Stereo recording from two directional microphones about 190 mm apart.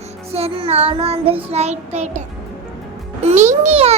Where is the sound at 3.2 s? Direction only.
35° right (ahead or behind).